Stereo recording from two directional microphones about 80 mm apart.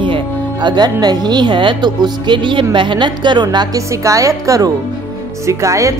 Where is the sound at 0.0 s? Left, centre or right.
Right.